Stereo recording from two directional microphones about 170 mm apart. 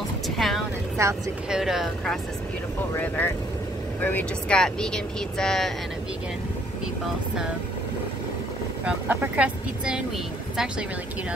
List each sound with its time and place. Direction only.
1.0 s speech: 15° right (ahead or behind)
1.5 s speech: centre (ahead or behind)
2.9 s speech: 10° left (ahead or behind)
8.8 s speech: 10° right (ahead or behind)